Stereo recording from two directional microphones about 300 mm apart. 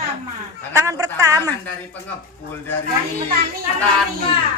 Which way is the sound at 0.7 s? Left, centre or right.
Centre.